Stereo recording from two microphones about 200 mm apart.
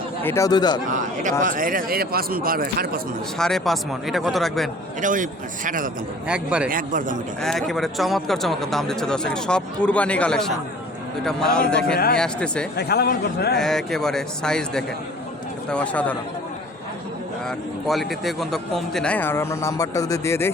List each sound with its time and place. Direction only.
0.2 s a man's voice: 15° left (ahead or behind)
0.9 s a man's voice: 40° right (ahead or behind)
3.3 s speech: centre (ahead or behind)
4.9 s a man's voice: 40° right (ahead or behind)
6.2 s speech: 5° right (ahead or behind)
6.7 s a man's voice: 40° right (ahead or behind)
7.4 s speech: centre (ahead or behind)
12.7 s a man's voice: 55° left (ahead or behind)
13.6 s a man's voice: centre (ahead or behind)
17.8 s a man's voice: centre (ahead or behind)